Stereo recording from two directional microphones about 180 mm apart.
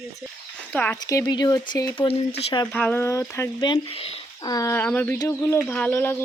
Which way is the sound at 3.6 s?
30° left (ahead or behind).